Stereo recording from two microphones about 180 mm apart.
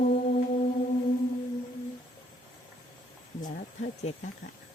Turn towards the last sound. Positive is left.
turn(degrees=60)  # may be behind; listen again after turning